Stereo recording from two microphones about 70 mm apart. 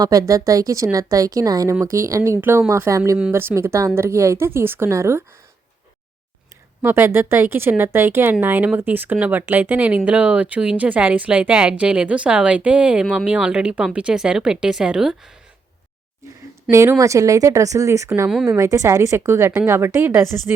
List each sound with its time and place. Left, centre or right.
0.0 s speech: right
2.4 s speech: right
6.8 s speech: right; by 15.3 s centre
16.7 s speech: right